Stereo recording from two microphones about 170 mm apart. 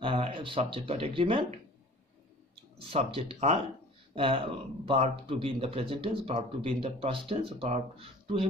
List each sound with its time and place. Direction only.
0.0 s speech: 30° right (ahead or behind)
2.8 s speech: 35° right (ahead or behind)